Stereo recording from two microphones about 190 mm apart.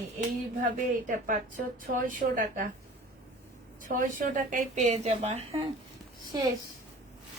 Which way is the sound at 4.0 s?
45° right (ahead or behind).